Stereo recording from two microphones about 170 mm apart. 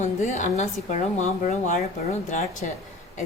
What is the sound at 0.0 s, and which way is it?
A woman's voice, 45° left (ahead or behind).